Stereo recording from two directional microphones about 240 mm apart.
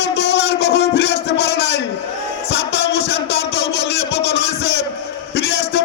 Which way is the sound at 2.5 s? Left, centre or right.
Left.